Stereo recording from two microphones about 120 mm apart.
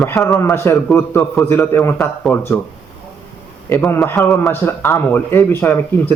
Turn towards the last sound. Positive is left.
turn(degrees=15)  # may be behind; listen again after turning